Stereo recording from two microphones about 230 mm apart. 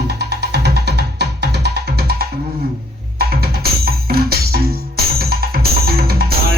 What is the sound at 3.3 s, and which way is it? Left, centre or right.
Music, right.